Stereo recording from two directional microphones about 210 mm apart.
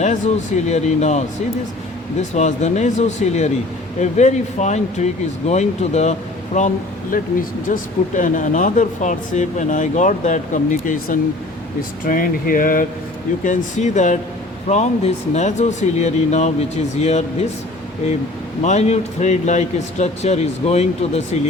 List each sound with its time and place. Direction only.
0.7 s speech: 35° left (ahead or behind)
18.6 s speech: 35° left (ahead or behind)